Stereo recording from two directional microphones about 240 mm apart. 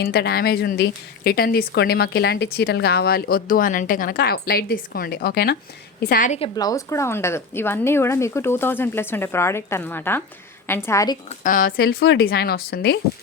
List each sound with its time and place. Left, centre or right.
0.0 s a woman's voice: left
6.6 s speech: centre
11.3 s a woman's voice: left